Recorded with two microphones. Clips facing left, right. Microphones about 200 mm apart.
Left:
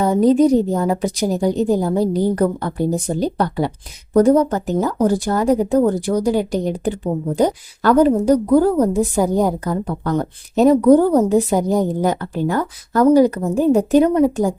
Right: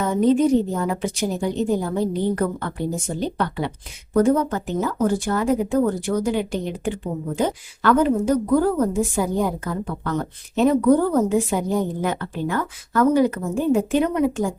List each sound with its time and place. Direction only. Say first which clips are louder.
0.0 s speech: left 4 dB; 35° left (ahead or behind)